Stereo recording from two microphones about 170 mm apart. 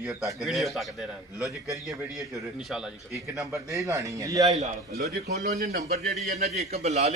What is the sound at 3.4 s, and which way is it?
A man's voice, 20° right (ahead or behind).